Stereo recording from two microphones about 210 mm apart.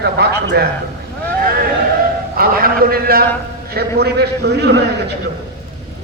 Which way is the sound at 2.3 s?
45° right (ahead or behind).